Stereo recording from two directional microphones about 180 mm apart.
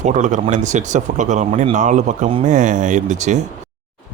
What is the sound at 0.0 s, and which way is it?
Speech, 40° right (ahead or behind).